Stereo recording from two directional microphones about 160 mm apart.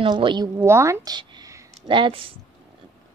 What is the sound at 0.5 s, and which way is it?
Speech, 15° right (ahead or behind).